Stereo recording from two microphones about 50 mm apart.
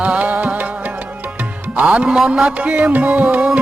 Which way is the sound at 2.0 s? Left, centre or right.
Centre.